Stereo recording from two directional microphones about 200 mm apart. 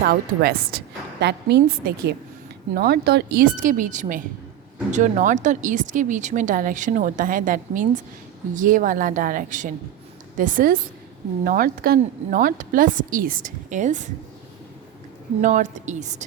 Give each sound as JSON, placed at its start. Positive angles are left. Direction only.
{"t": 0.1, "sound": "a woman's voice", "side_deg": -50}
{"t": 15.4, "sound": "speech", "side_deg": -40}